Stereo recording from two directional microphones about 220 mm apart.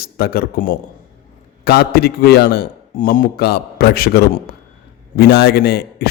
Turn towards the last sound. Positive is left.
turn(degrees=45)  # may be behind; listen again after turning